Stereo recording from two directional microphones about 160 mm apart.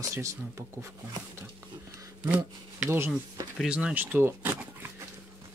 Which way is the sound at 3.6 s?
5° right (ahead or behind).